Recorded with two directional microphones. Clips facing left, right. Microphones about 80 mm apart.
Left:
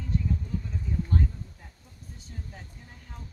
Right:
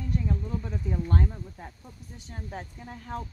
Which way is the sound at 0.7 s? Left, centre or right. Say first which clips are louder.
Right 2 dB; right.